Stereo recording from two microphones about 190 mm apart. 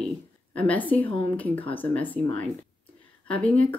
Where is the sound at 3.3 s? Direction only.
5° left (ahead or behind).